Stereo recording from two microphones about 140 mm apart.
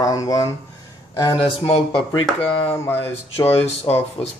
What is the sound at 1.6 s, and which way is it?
Speech, 45° left (ahead or behind).